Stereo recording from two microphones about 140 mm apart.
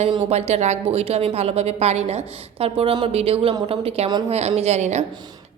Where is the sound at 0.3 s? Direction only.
50° right (ahead or behind).